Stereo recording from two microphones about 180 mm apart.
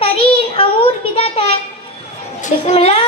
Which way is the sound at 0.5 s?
30° left (ahead or behind).